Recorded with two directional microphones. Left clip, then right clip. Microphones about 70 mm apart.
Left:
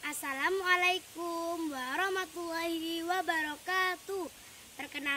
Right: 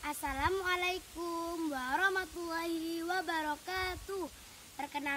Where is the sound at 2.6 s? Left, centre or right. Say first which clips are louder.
Left 2 dB; right.